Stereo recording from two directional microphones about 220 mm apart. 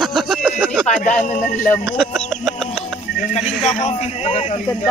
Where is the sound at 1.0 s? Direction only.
35° left (ahead or behind).